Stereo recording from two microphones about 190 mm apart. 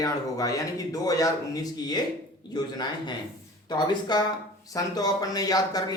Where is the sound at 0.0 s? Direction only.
20° left (ahead or behind).